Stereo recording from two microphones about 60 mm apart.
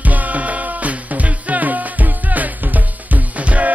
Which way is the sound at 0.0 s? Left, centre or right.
Right.